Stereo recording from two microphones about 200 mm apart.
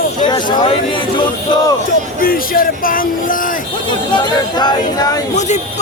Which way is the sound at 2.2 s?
45° left (ahead or behind).